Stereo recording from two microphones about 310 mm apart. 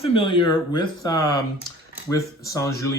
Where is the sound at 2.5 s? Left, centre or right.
Centre.